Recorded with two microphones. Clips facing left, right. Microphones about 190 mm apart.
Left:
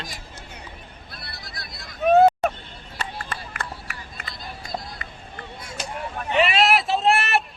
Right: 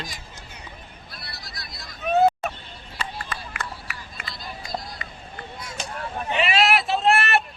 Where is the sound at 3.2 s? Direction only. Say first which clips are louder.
Even; 45° left (ahead or behind).